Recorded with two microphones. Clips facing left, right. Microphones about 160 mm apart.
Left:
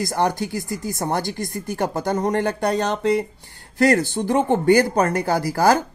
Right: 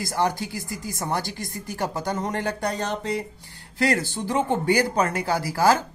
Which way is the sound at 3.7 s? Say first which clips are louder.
Left 6 dB; 45° left (ahead or behind).